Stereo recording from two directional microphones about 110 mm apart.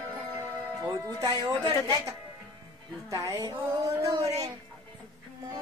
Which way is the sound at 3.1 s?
30° right (ahead or behind).